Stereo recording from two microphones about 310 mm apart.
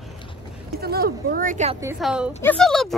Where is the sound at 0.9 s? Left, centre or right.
Right.